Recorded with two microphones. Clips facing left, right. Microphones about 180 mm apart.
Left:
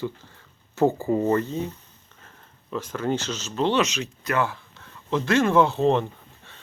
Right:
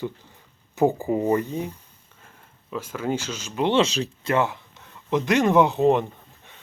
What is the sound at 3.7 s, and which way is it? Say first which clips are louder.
Speech: right 3 dB; 35° right (ahead or behind).